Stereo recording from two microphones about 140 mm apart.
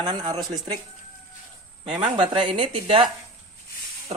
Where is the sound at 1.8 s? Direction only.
40° right (ahead or behind).